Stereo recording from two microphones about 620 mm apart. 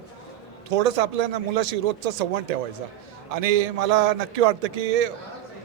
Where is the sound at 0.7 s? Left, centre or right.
Right.